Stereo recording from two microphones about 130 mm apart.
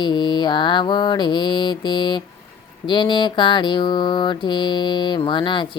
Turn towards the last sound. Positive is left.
turn(degrees=40)  # may be behind; listen again after turning